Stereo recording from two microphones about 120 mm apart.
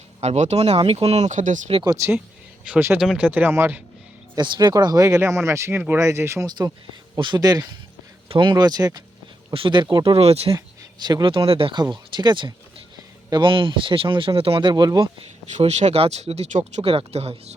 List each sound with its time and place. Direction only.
0.2 s speech: 65° right (ahead or behind); by 1.7 s 90° right
1.8 s speech: 30° right (ahead or behind)
2.6 s speech: 15° right (ahead or behind)
4.4 s speech: 40° right (ahead or behind); by 6.5 s 25° right (ahead or behind)
7.2 s speech: 35° right (ahead or behind)
8.3 s speech: 45° right (ahead or behind)
9.5 s speech: 45° right (ahead or behind)
11.0 s speech: 35° right (ahead or behind)
14.7 s speech: 35° right (ahead or behind)
15.5 s speech: 70° right (ahead or behind)
16.8 s speech: 50° right (ahead or behind)